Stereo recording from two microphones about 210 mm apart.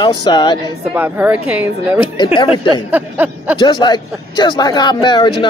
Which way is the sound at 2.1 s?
25° left (ahead or behind).